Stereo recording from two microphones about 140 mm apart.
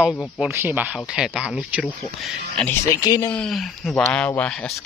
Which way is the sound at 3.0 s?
30° left (ahead or behind).